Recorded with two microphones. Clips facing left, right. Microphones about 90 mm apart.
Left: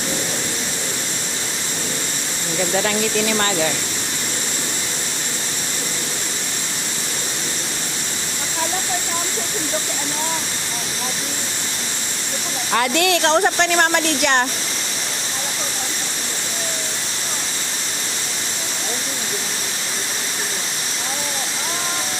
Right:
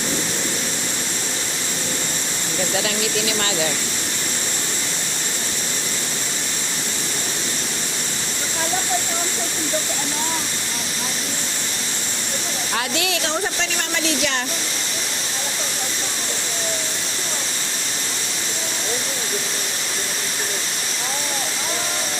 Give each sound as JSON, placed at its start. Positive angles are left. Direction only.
{"t": 2.7, "sound": "speech", "side_deg": 50}
{"t": 12.7, "sound": "speech", "side_deg": 60}